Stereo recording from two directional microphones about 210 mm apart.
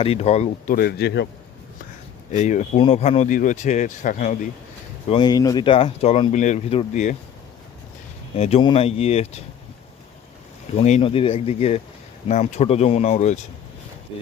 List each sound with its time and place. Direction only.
0.0 s speech: 30° left (ahead or behind)
0.8 s speech: 50° left (ahead or behind)
2.3 s speech: 35° left (ahead or behind)
5.0 s speech: 25° left (ahead or behind)
8.4 s speech: 30° left (ahead or behind)
10.8 s speech: 30° left (ahead or behind)